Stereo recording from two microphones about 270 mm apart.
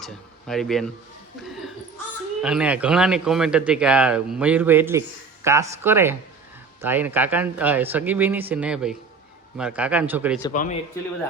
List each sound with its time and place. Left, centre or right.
0.0 s speech: centre
2.4 s a man's voice: centre
10.5 s a man's voice: left